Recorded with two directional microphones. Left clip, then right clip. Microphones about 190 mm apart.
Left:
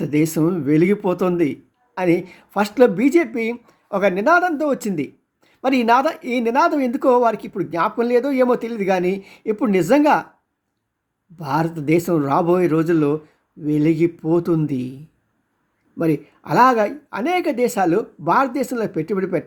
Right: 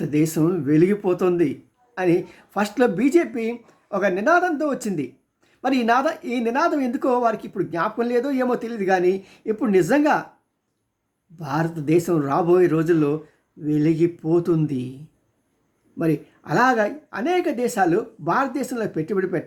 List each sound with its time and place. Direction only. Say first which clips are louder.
0.0 s speech: left 2 dB; 15° left (ahead or behind)
11.3 s speech: left 4 dB; 15° left (ahead or behind)
16.0 s speech: left 3 dB; 15° left (ahead or behind)